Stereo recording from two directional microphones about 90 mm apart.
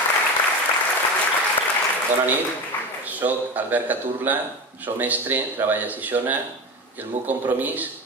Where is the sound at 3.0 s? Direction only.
20° right (ahead or behind).